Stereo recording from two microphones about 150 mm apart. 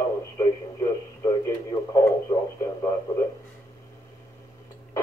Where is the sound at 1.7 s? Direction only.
20° left (ahead or behind).